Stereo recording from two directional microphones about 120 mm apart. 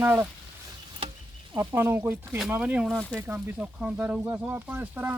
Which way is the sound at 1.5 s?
20° right (ahead or behind).